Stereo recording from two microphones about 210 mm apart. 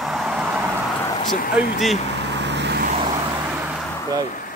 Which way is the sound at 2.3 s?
55° right (ahead or behind).